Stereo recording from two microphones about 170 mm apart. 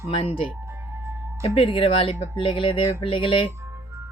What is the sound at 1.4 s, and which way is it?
Speech, 35° left (ahead or behind).